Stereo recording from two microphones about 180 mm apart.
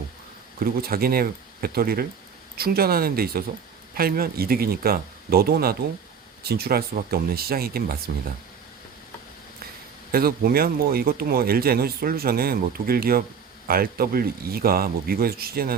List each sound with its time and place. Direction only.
0.6 s speech: 55° right (ahead or behind)
10.1 s speech: 55° right (ahead or behind)